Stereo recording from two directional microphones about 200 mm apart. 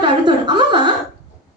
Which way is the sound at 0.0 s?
25° right (ahead or behind).